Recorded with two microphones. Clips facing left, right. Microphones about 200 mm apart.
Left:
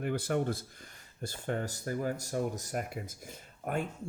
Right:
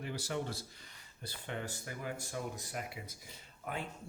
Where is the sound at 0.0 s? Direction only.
55° left (ahead or behind).